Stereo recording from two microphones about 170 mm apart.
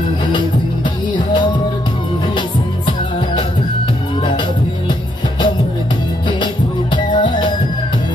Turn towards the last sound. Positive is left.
turn(degrees=25)  # may be behind; listen again after turning